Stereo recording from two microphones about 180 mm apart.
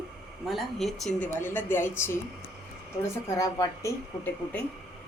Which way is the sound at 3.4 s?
20° left (ahead or behind).